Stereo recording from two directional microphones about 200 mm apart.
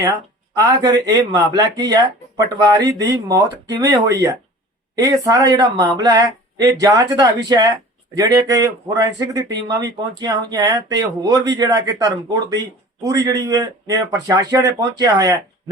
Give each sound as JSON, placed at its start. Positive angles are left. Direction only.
{"t": 0.5, "sound": "speech", "side_deg": -20}